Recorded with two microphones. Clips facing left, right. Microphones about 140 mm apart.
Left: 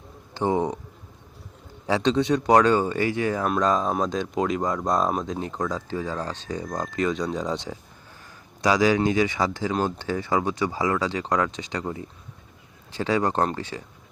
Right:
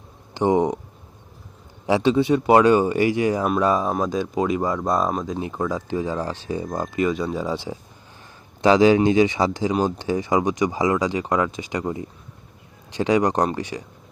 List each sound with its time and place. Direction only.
0.3 s speech: 15° right (ahead or behind)
1.9 s speech: 10° right (ahead or behind)
8.6 s speech: 25° right (ahead or behind)